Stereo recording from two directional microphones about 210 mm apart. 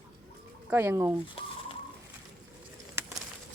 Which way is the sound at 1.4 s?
25° left (ahead or behind).